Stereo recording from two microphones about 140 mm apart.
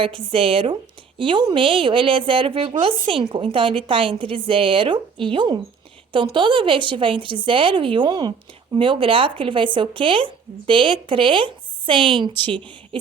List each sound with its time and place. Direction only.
0.0 s a woman's voice: 40° right (ahead or behind)